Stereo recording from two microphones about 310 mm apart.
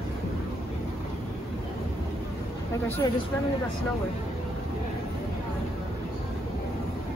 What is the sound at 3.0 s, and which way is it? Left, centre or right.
Speech, centre.